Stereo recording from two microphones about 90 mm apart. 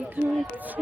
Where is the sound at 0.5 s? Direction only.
20° right (ahead or behind).